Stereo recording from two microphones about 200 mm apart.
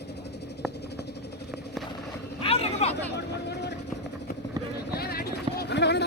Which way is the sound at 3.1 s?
55° left (ahead or behind).